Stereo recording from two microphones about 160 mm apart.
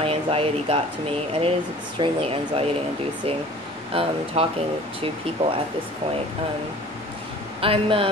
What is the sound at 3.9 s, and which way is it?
Speech, 35° right (ahead or behind).